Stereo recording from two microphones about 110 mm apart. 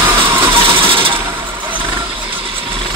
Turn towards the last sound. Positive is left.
turn(degrees=-55)  # may be behind; listen again after turning